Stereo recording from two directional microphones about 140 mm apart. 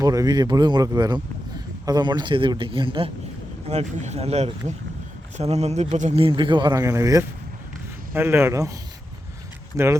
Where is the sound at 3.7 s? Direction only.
50° right (ahead or behind).